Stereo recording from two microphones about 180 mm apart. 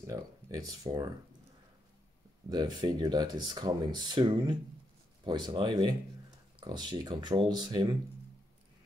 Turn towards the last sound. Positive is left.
turn(degrees=-25)  # may be behind; listen again after turning